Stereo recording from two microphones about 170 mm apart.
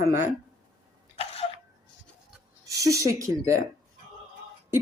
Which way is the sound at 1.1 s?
35° left (ahead or behind).